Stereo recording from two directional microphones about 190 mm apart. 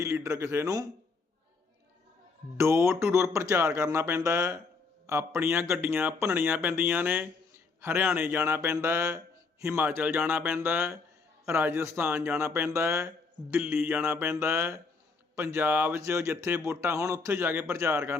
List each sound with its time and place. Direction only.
0.0 s speech: 15° right (ahead or behind)
2.6 s speech: 15° right (ahead or behind)